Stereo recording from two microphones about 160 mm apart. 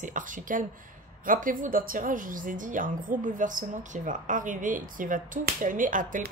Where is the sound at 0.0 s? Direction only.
55° right (ahead or behind).